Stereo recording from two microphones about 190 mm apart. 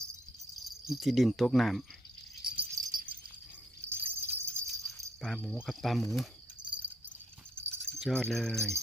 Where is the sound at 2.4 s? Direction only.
50° right (ahead or behind).